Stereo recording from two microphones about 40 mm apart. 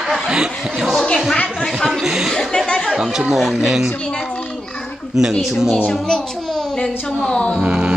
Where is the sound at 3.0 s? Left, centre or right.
Centre.